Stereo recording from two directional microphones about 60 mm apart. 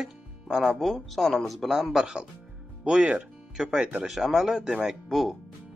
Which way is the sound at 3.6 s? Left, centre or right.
Centre.